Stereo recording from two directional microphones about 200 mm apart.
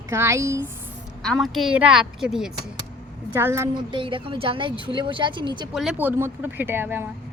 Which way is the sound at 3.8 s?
25° right (ahead or behind).